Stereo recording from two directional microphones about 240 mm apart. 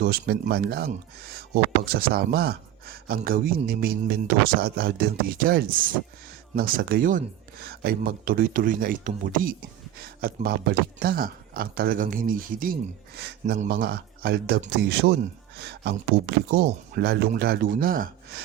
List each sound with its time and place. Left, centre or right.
0.0 s speech: right